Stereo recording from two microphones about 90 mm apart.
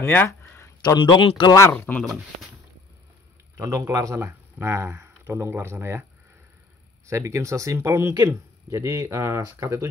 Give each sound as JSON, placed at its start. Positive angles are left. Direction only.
{"t": 0.0, "sound": "speech", "side_deg": 20}
{"t": 0.3, "sound": "a sound", "side_deg": 35}
{"t": 0.8, "sound": "speech", "side_deg": 60}
{"t": 1.7, "sound": "speech", "side_deg": 20}
{"t": 3.5, "sound": "speech", "side_deg": -35}
{"t": 7.1, "sound": "speech", "side_deg": -35}